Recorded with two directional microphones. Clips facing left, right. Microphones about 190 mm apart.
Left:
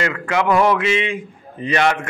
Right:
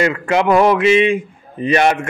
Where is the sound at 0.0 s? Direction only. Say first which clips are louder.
Right 4 dB; 20° right (ahead or behind).